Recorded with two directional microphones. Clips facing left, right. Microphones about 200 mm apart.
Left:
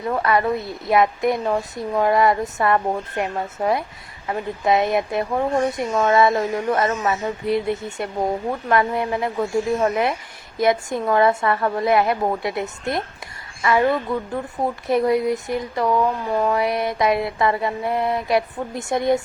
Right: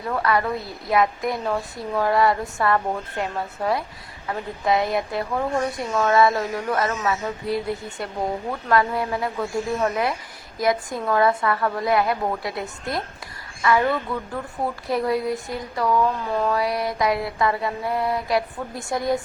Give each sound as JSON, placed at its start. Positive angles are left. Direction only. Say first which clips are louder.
{"t": 0.1, "sound": "speech", "louder": "left 3 dB", "side_deg": 20}